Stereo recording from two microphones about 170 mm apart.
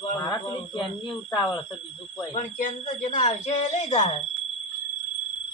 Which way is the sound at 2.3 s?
45° left (ahead or behind).